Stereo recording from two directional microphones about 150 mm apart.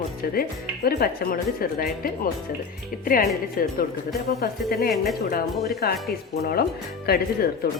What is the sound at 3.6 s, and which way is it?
Speech, 70° left (ahead or behind).